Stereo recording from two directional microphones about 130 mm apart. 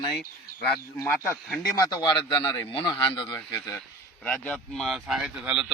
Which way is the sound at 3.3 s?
15° left (ahead or behind).